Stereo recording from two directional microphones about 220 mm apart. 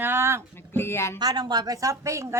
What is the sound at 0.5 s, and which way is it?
Speech, 10° left (ahead or behind).